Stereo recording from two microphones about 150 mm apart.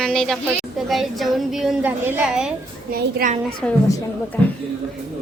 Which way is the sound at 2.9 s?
70° right (ahead or behind).